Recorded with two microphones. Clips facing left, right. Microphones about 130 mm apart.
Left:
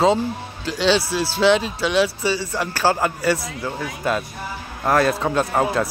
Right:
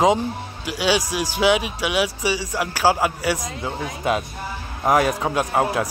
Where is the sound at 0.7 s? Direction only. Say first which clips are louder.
Left 2 dB; 10° right (ahead or behind).